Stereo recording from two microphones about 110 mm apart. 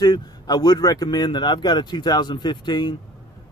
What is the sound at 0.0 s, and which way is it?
Speech, 35° left (ahead or behind).